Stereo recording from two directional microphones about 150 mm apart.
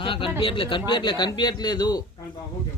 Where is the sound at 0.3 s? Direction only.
35° left (ahead or behind).